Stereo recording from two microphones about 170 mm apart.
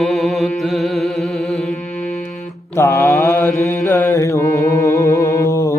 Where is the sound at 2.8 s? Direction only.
15° left (ahead or behind).